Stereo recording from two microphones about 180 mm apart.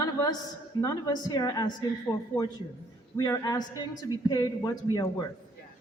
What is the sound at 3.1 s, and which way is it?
A woman's voice, 20° left (ahead or behind).